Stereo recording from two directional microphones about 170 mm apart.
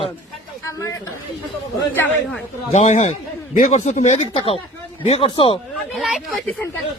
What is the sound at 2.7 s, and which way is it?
A man's voice, 45° left (ahead or behind).